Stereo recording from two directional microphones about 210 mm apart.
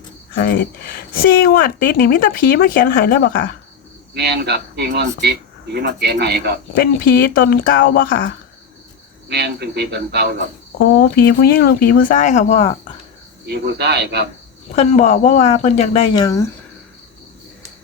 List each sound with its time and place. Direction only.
0.4 s speech: 45° left (ahead or behind)
4.1 s speech: 50° right (ahead or behind)
6.7 s speech: 45° left (ahead or behind)
9.3 s speech: 50° right (ahead or behind)
11.0 s speech: 45° left (ahead or behind); by 12.7 s 30° left (ahead or behind)
13.5 s speech: 50° right (ahead or behind)
14.7 s speech: 30° left (ahead or behind)